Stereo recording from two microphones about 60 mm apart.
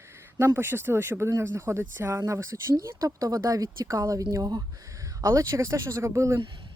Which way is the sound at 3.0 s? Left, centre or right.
Right.